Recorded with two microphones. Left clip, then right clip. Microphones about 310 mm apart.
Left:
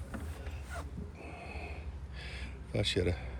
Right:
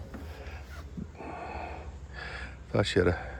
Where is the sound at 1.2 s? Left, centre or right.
Right.